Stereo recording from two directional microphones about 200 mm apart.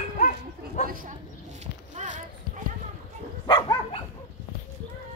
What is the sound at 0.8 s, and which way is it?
Speech, 45° right (ahead or behind).